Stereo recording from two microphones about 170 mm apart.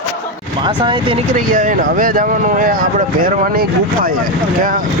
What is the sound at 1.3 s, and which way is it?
Speech, 50° right (ahead or behind).